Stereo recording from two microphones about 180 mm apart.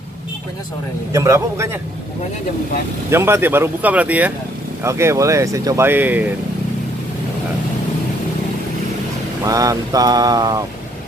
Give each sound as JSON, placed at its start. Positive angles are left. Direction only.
{"t": 1.1, "sound": "speech", "side_deg": -15}
{"t": 3.1, "sound": "speech", "side_deg": -15}
{"t": 9.4, "sound": "speech", "side_deg": -20}